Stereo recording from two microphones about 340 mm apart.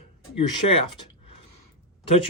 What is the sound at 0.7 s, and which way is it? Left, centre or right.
Speech, centre.